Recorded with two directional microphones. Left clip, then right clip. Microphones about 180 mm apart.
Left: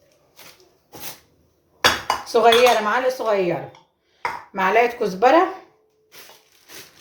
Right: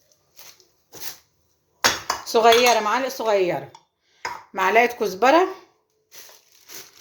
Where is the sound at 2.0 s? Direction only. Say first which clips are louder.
Left 1 dB; 50° right (ahead or behind).